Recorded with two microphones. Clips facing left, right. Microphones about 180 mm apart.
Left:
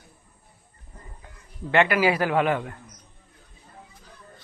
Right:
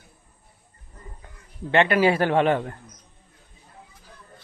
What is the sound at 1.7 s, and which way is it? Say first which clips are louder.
A man's voice: right 2 dB; 25° right (ahead or behind).